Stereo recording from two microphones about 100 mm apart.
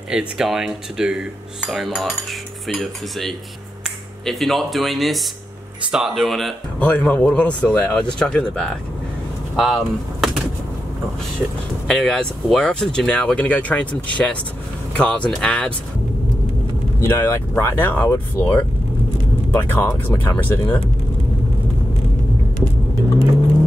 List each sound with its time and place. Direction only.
0.1 s speech: 5° right (ahead or behind)
6.9 s speech: 15° left (ahead or behind); by 10.4 s centre (ahead or behind)
11.9 s speech: 5° left (ahead or behind)
17.0 s speech: 25° left (ahead or behind)